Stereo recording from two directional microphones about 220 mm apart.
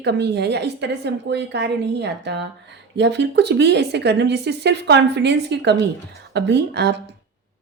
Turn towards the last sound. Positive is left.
turn(degrees=-50)  # may be behind; listen again after turning